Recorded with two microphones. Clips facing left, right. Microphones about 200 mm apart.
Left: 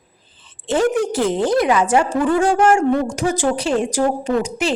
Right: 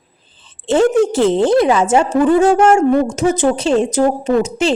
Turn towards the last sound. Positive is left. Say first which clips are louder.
# right 5 dB
turn(degrees=-25)  # may be behind; listen again after turning